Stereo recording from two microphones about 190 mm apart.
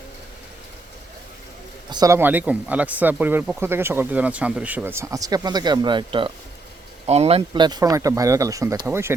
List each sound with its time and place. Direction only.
1.9 s speech: 20° right (ahead or behind)